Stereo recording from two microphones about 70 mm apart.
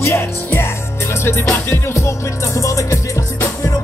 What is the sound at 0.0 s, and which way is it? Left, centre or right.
Music, left.